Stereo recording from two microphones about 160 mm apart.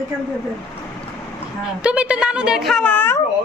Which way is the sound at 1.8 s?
5° right (ahead or behind).